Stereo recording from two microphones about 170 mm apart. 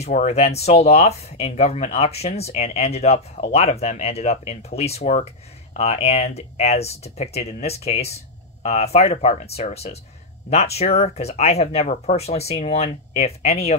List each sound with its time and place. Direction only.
0.0 s speech: 40° left (ahead or behind)